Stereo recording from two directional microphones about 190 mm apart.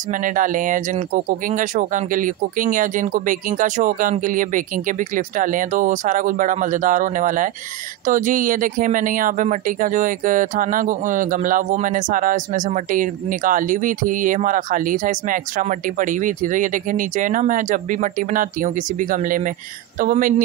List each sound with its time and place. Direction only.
0.1 s speech: 45° right (ahead or behind)